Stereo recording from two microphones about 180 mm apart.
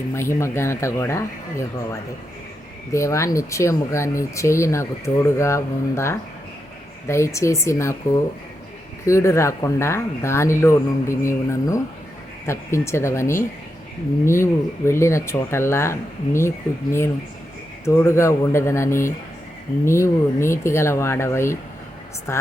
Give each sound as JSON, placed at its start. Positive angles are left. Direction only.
{"t": 0.1, "sound": "speech", "side_deg": 15}
{"t": 9.0, "sound": "speech", "side_deg": 15}
{"t": 17.8, "sound": "speech", "side_deg": 15}